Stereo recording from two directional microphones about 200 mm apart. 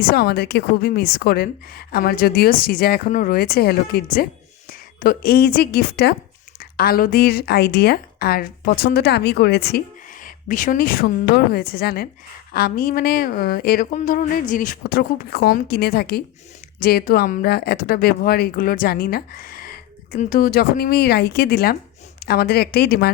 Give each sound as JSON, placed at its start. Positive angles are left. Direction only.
{"t": 0.0, "sound": "speech", "side_deg": 50}
{"t": 10.2, "sound": "speech", "side_deg": 40}